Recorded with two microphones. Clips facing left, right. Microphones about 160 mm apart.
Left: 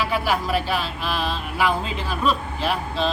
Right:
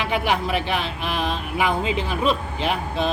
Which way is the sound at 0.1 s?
20° right (ahead or behind).